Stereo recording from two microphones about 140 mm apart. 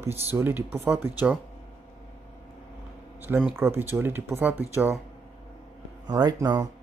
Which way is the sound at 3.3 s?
10° right (ahead or behind).